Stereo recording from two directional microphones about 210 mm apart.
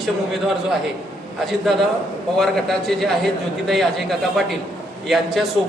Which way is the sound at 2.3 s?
Centre (ahead or behind).